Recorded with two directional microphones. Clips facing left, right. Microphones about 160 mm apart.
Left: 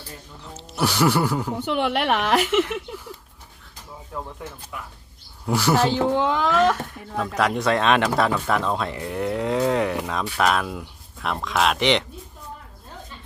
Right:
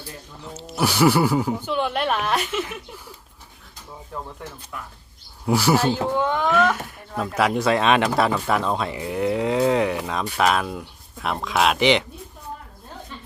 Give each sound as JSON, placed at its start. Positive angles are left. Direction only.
{"t": 0.5, "sound": "speech", "side_deg": -5}
{"t": 1.5, "sound": "a woman's voice", "side_deg": 80}
{"t": 5.5, "sound": "speech", "side_deg": -5}
{"t": 6.1, "sound": "speech", "side_deg": 90}
{"t": 6.8, "sound": "speech", "side_deg": -5}